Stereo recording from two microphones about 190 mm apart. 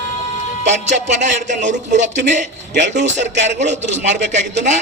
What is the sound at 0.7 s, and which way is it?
Speech, 40° right (ahead or behind).